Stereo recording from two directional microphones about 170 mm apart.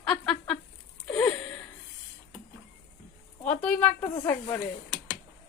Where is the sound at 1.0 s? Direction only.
5° left (ahead or behind).